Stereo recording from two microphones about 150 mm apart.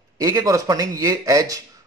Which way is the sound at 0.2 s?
25° right (ahead or behind).